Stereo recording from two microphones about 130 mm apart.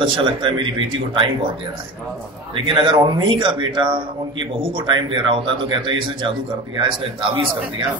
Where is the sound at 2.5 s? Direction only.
40° right (ahead or behind).